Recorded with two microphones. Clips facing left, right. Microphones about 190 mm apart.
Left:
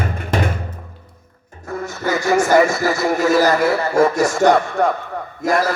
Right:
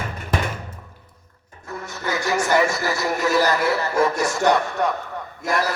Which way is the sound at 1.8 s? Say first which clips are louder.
Left 6 dB; 45° left (ahead or behind).